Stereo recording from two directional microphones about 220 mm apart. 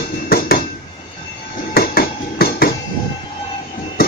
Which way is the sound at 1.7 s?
45° left (ahead or behind).